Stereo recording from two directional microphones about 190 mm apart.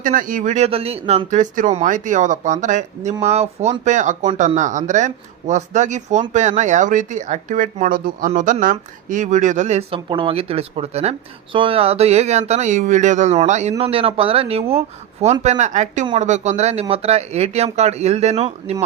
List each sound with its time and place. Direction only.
0.0 s speech: 45° right (ahead or behind)